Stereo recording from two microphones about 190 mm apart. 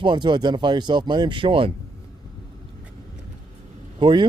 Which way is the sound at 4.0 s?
25° right (ahead or behind).